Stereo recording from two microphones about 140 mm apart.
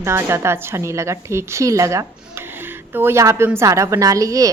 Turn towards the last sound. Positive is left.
turn(degrees=-25)  # may be behind; listen again after turning